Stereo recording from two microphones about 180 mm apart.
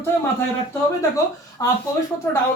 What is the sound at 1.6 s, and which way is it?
Speech, 20° left (ahead or behind).